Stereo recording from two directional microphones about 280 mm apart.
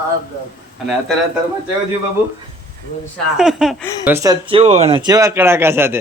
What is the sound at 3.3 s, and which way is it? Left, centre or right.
Speech, centre.